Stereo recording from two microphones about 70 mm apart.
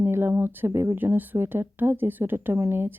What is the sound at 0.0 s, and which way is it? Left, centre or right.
Speech, right.